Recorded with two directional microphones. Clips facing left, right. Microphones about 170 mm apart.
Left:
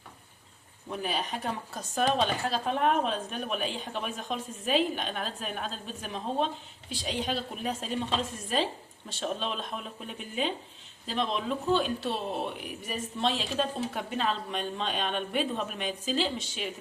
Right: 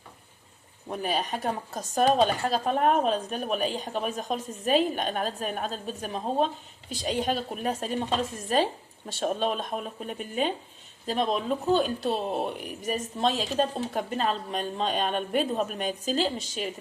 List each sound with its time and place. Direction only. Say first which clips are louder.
0.9 s speech: right 3 dB; 45° right (ahead or behind)
9.2 s speech: right 5 dB; 45° right (ahead or behind)